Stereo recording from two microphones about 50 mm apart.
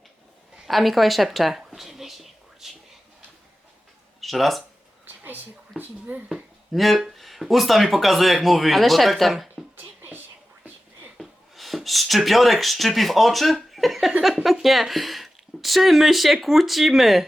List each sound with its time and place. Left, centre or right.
0.7 s a sound: centre
4.2 s speech: centre
5.8 s speech: right
6.2 s speech: centre
9.7 s a sound: right
11.2 s speech: centre